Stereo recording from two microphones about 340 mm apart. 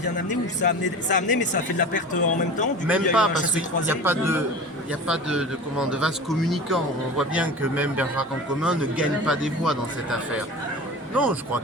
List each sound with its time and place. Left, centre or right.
0.3 s speech: left
2.8 s a man's voice: centre